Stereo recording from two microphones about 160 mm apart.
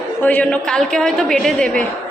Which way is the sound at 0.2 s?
5° left (ahead or behind).